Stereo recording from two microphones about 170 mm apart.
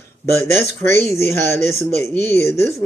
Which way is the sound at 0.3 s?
15° left (ahead or behind).